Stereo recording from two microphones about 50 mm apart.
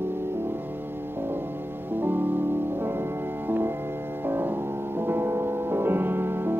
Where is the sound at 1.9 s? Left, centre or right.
Right.